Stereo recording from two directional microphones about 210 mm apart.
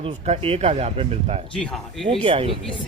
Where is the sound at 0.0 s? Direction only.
25° right (ahead or behind).